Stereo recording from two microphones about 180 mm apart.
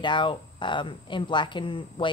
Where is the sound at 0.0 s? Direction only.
25° left (ahead or behind).